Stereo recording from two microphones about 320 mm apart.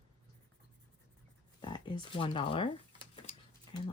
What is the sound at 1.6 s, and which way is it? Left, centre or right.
Speech, centre.